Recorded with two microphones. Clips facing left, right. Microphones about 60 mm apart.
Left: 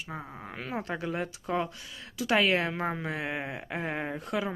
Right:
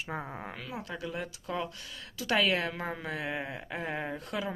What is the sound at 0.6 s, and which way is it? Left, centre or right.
A woman's voice, left.